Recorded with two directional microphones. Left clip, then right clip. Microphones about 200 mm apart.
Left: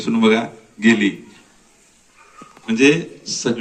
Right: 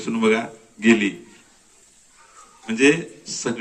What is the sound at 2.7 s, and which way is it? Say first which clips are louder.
Speech: left 3 dB; 20° left (ahead or behind).